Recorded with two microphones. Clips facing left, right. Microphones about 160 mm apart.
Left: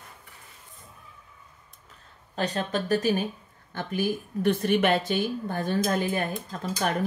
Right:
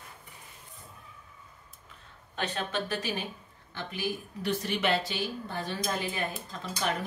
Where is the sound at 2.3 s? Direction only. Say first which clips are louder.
Left 5 dB; 35° left (ahead or behind).